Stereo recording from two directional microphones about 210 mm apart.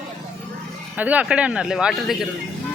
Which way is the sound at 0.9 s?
5° right (ahead or behind).